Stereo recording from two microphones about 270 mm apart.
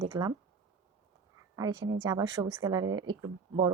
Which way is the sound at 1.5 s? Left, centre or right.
Centre.